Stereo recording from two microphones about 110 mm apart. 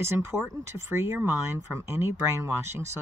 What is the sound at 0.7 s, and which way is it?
Speech, 25° right (ahead or behind).